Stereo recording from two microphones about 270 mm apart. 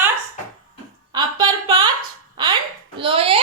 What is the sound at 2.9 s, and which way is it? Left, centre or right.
Speech, centre.